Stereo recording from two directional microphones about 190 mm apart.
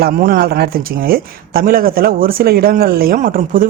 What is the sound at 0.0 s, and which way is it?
Speech, 50° right (ahead or behind).